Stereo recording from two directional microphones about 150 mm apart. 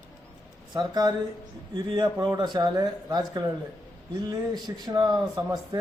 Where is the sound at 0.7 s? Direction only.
25° right (ahead or behind).